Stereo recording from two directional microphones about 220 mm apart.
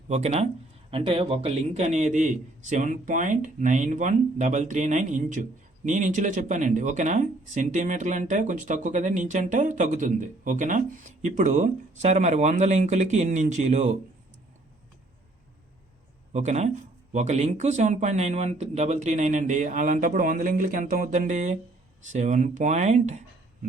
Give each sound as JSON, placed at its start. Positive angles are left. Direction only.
{"t": 0.1, "sound": "a man's voice", "side_deg": -30}
{"t": 16.3, "sound": "speech", "side_deg": -30}